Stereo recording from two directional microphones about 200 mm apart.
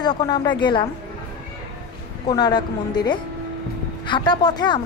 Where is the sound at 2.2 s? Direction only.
20° left (ahead or behind).